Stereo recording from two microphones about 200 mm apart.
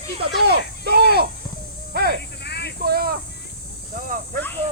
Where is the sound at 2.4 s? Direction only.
55° left (ahead or behind).